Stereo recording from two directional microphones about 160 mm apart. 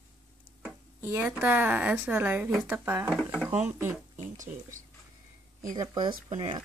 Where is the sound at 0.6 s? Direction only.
10° right (ahead or behind).